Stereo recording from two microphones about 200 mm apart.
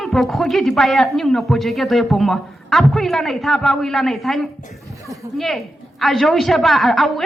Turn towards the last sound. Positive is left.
turn(degrees=0)  # may be behind; listen again after turning